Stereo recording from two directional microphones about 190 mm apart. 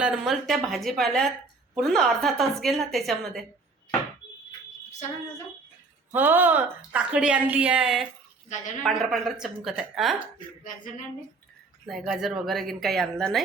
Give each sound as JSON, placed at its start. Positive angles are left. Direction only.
{"t": 0.0, "sound": "a woman's voice", "side_deg": 0}
{"t": 6.1, "sound": "a woman's voice", "side_deg": -10}
{"t": 11.9, "sound": "a woman's voice", "side_deg": 0}